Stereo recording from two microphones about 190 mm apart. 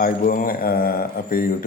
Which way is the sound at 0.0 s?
50° left (ahead or behind).